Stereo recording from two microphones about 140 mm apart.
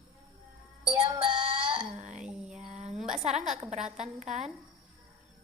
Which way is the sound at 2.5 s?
55° right (ahead or behind).